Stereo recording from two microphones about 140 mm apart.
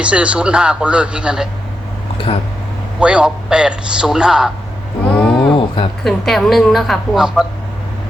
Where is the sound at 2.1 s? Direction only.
40° left (ahead or behind).